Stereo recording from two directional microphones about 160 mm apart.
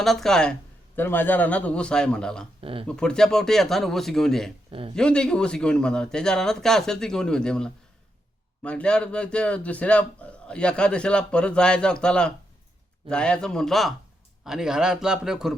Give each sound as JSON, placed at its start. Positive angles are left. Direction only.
{"t": 0.0, "sound": "a man's voice", "side_deg": 0}
{"t": 2.6, "sound": "speech", "side_deg": -35}
{"t": 2.8, "sound": "a man's voice", "side_deg": 5}